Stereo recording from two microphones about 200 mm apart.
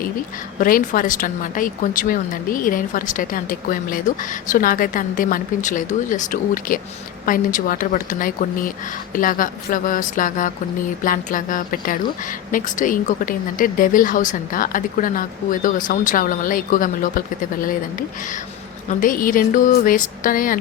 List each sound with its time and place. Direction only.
0.6 s speech: 45° left (ahead or behind)
18.9 s speech: 40° left (ahead or behind)